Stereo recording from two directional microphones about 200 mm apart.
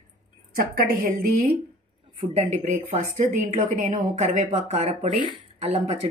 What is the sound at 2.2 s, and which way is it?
Speech, 30° right (ahead or behind).